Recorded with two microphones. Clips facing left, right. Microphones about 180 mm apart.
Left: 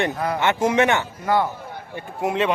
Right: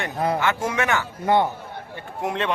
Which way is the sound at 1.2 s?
25° right (ahead or behind).